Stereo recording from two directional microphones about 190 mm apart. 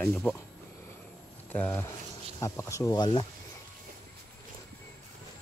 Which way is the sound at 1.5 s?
10° left (ahead or behind).